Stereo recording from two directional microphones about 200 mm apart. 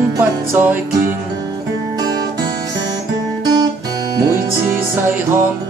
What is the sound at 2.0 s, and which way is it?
Music, 20° right (ahead or behind).